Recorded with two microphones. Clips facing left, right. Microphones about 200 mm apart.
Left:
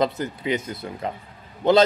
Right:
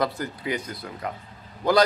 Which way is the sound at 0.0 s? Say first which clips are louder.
Left 3 dB; 20° left (ahead or behind).